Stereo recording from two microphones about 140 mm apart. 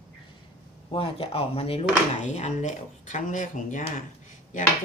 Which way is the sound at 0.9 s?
40° left (ahead or behind).